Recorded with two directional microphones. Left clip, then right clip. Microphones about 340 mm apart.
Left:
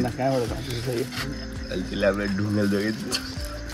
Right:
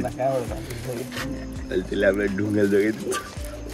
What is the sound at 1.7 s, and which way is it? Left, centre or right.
Speech, centre.